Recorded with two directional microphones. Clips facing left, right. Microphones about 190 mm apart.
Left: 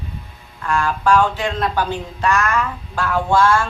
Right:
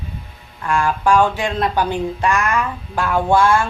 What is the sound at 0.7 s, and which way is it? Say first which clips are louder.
Speech: right 1 dB; 15° right (ahead or behind).